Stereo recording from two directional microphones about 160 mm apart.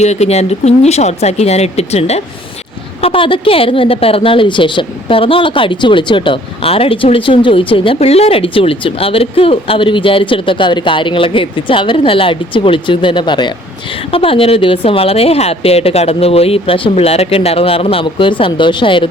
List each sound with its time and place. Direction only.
0.0 s a woman's voice: 45° left (ahead or behind)